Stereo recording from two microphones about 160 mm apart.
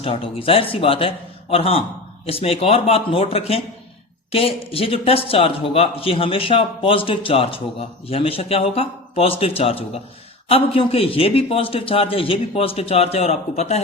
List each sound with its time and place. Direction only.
0.0 s a man's voice: 35° left (ahead or behind)